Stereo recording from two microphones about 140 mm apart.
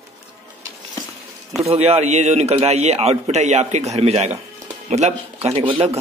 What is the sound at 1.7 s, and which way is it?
A man's voice, 45° right (ahead or behind).